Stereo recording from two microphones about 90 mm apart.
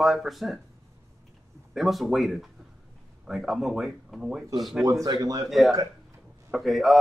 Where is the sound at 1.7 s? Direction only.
Centre (ahead or behind).